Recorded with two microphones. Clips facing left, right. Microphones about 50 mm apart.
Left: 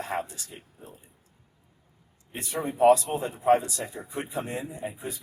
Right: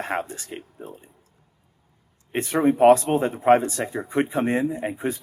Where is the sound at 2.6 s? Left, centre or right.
Right.